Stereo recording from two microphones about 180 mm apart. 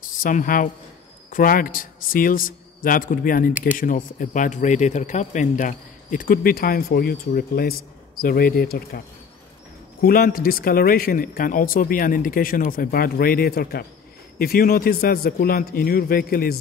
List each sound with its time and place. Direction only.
0.0 s speech: 50° left (ahead or behind)
10.0 s a man's voice: 55° left (ahead or behind)